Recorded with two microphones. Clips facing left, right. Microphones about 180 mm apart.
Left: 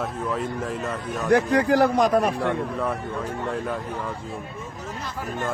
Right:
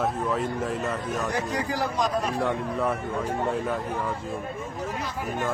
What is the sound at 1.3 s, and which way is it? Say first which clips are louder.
A man's voice: left 15 dB; 60° left (ahead or behind).